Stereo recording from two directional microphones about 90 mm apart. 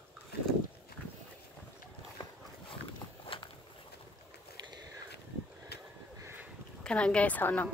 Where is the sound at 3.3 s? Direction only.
80° left.